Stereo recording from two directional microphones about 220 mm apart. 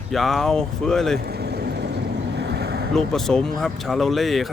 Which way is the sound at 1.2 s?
45° right (ahead or behind).